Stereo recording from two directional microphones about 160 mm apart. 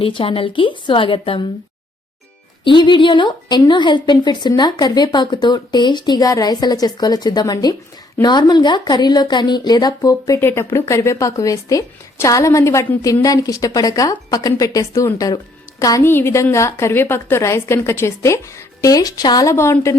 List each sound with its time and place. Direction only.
0.0 s a woman's voice: 35° left (ahead or behind)
2.6 s a woman's voice: 30° left (ahead or behind)